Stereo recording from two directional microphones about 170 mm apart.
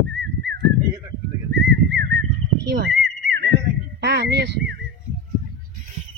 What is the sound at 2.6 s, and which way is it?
Speech, 80° right.